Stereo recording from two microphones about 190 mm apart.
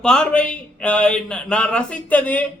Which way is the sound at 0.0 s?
5° left (ahead or behind).